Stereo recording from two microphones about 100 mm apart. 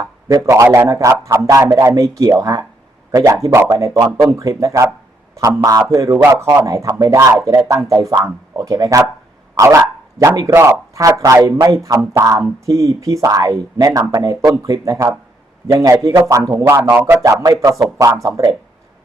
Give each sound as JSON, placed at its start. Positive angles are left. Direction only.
{"t": 0.0, "sound": "a sound", "side_deg": -45}
{"t": 0.4, "sound": "speech", "side_deg": -30}
{"t": 16.8, "sound": "speech", "side_deg": -25}
{"t": 17.2, "sound": "speech", "side_deg": -35}